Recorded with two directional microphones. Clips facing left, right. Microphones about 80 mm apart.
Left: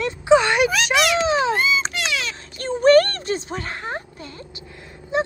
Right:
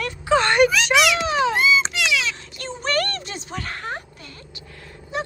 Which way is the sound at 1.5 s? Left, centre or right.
Left.